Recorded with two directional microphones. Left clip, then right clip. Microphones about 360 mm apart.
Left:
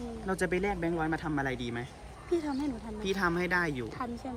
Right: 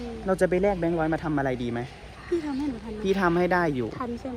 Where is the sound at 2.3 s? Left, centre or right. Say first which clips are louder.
Right 3 dB; centre.